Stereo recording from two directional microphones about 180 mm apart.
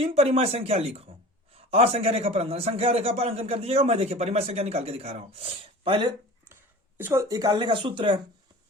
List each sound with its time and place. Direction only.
0.0 s a man's voice: 35° right (ahead or behind)
6.5 s speech: 15° right (ahead or behind)